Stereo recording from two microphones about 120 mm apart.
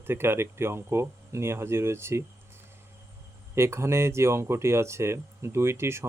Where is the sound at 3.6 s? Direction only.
20° right (ahead or behind).